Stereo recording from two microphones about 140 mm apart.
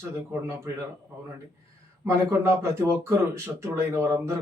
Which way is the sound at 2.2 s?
20° right (ahead or behind).